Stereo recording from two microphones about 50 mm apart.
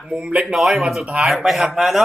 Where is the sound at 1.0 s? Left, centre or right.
Right.